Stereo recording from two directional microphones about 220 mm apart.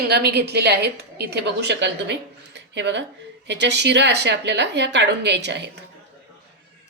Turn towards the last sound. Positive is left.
turn(degrees=-50)  # may be behind; listen again after turning